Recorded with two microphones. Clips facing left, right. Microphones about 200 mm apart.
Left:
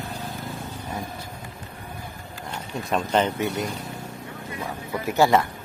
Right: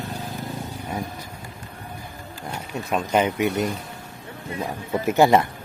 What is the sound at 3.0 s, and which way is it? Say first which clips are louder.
Speech: right 3 dB; 10° right (ahead or behind).